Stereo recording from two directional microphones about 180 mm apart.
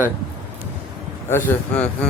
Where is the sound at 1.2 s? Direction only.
10° left (ahead or behind).